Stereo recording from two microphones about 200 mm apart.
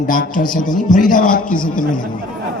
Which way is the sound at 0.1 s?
40° left (ahead or behind).